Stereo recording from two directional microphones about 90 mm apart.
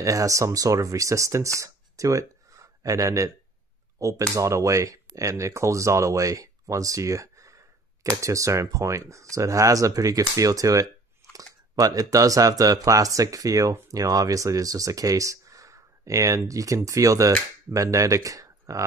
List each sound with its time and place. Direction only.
0.0 s speech: 40° right (ahead or behind)